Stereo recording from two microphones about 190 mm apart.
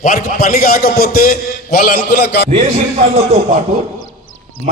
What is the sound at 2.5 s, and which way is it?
A man's voice, 35° right (ahead or behind).